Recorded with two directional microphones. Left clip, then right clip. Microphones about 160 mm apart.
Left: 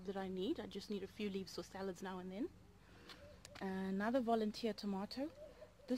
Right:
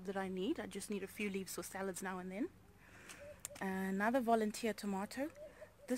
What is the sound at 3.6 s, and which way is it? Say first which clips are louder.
A woman's voice: right 4 dB; 15° right (ahead or behind).